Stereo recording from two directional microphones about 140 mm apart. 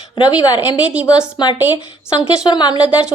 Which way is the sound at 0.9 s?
10° right (ahead or behind).